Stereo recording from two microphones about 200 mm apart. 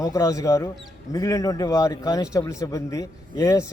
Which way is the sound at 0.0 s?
15° left (ahead or behind).